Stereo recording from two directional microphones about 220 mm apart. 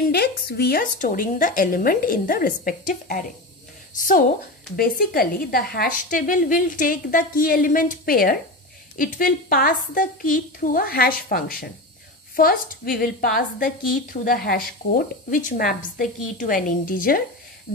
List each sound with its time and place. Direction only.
0.1 s a woman's voice: 45° left (ahead or behind)